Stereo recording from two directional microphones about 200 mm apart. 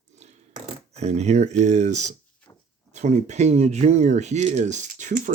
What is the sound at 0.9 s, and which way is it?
Speech, 35° right (ahead or behind).